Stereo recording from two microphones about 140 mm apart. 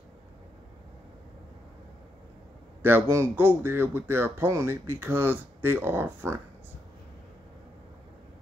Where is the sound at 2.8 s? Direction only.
15° right (ahead or behind).